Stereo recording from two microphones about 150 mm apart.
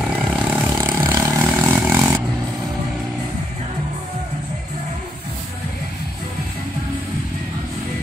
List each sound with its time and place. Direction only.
0.3 s vehicle: 10° right (ahead or behind)